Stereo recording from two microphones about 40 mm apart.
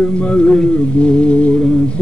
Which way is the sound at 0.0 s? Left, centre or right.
Left.